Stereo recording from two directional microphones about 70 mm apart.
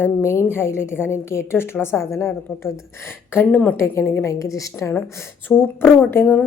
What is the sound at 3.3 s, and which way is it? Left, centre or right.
Speech, left.